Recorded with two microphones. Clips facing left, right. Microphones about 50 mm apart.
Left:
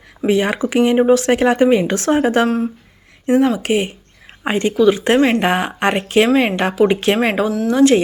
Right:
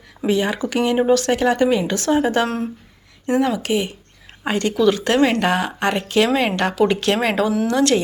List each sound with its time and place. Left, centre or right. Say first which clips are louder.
0.3 s speech: left 3 dB; left
0.6 s speech: left 4 dB; left
3.2 s speech: left 4 dB; centre
3.6 s speech: left 3 dB; left
4.4 s speech: left 3 dB; left